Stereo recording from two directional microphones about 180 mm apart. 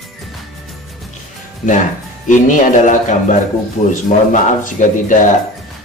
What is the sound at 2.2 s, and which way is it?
Speech, 45° left (ahead or behind).